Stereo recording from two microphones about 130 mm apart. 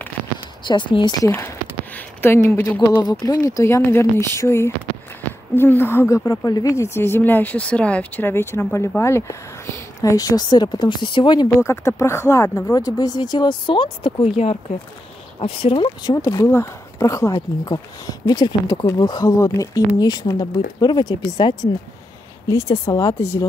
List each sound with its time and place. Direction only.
0.7 s speech: 40° left (ahead or behind)
1.2 s speech: 20° left (ahead or behind)
3.0 s a woman's voice: 30° left (ahead or behind)
11.4 s speech: 20° left (ahead or behind)